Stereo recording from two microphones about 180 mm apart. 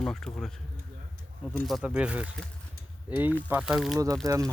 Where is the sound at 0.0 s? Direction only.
5° left (ahead or behind).